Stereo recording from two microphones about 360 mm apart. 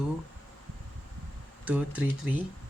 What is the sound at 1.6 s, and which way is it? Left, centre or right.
Speech, centre.